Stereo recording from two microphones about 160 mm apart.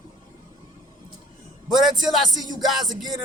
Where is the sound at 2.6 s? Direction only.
Centre (ahead or behind).